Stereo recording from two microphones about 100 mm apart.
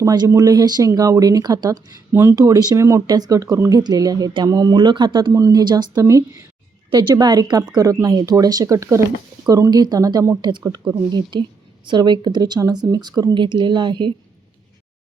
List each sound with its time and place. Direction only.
0.0 s speech: 40° right (ahead or behind)
5.3 s speech: 35° right (ahead or behind)
6.9 s speech: 45° right (ahead or behind)
11.1 s speech: 50° right (ahead or behind)